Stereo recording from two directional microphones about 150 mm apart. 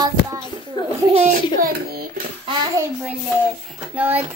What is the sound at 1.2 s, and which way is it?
Speech, 70° right (ahead or behind).